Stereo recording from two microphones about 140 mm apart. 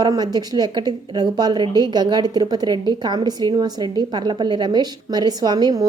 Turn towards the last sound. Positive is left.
turn(degrees=-30)  # may be behind; listen again after turning